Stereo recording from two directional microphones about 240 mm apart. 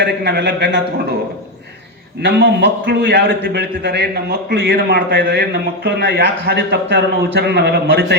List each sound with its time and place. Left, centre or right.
0.0 s a man's voice: right
2.2 s a man's voice: right